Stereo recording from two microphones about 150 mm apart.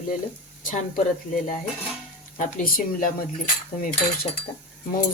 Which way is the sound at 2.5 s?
70° left (ahead or behind).